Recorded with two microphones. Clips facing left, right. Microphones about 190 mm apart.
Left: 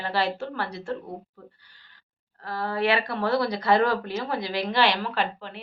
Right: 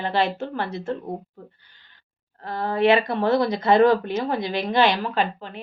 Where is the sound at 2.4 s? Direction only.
20° right (ahead or behind).